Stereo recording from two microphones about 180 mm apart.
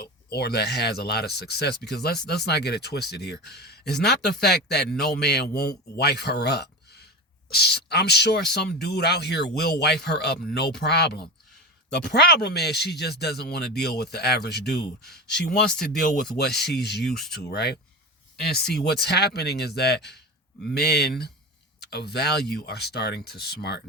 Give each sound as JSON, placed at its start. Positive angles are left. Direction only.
{"t": 0.0, "sound": "speech", "side_deg": 60}
{"t": 15.0, "sound": "speech", "side_deg": 5}
{"t": 16.0, "sound": "speech", "side_deg": 60}
{"t": 17.0, "sound": "speech", "side_deg": 0}
{"t": 17.5, "sound": "speech", "side_deg": 65}